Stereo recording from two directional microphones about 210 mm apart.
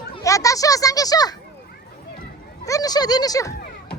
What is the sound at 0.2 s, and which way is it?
A child's voice, 15° left (ahead or behind).